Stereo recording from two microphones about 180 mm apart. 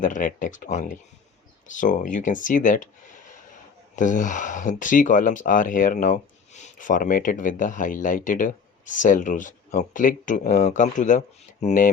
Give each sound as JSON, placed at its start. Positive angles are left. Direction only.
{"t": 0.0, "sound": "speech", "side_deg": 45}